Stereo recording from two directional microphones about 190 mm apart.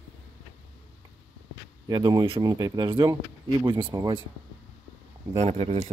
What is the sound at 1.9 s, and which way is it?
Speech, 20° right (ahead or behind).